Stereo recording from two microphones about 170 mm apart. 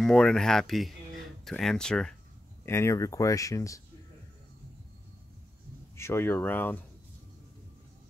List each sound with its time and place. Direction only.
0.0 s speech: 5° left (ahead or behind)
2.6 s speech: 15° left (ahead or behind)
5.9 s speech: 15° left (ahead or behind)